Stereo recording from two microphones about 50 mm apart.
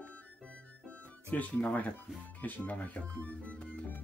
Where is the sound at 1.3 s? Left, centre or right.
Left.